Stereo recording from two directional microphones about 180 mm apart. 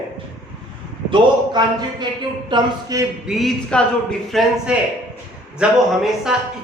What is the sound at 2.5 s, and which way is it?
Speech, 20° right (ahead or behind).